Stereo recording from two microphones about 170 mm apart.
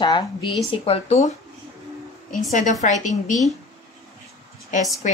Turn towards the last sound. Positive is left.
turn(degrees=45)  # may be behind; listen again after turning